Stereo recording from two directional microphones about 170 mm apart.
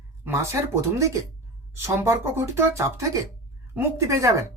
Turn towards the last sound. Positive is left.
turn(degrees=-15)  # may be behind; listen again after turning